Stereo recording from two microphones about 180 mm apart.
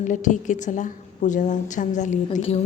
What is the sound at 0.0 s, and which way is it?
A woman's voice, 45° left (ahead or behind).